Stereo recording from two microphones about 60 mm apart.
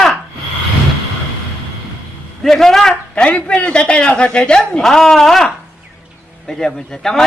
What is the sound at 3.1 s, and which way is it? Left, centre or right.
A man's voice, left.